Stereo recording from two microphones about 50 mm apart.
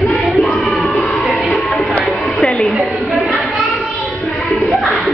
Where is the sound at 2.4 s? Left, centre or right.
Centre.